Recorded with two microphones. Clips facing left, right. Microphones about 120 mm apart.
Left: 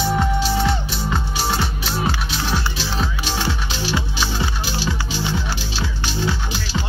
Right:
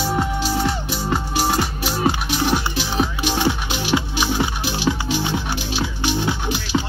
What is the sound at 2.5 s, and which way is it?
Music, 15° right (ahead or behind).